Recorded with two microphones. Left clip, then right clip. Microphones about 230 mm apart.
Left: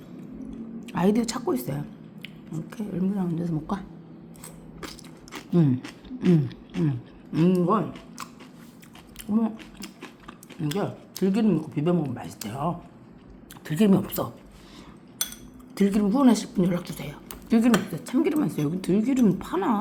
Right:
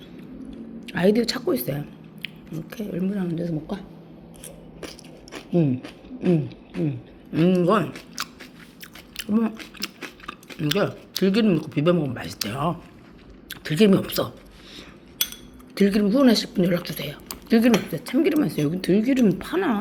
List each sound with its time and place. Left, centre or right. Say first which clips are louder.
0.9 s speech: right 4 dB; centre
5.5 s speech: right 2 dB; left
7.6 s speech: right 4 dB; centre
9.4 s a sound: right 3 dB; centre
11.2 s speech: right 4 dB; centre
15.8 s speech: right 3 dB; centre